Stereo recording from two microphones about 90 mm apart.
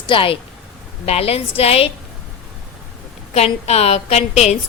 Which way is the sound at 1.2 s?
90° left.